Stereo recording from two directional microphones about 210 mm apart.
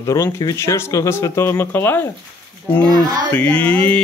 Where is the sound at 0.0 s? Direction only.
15° left (ahead or behind).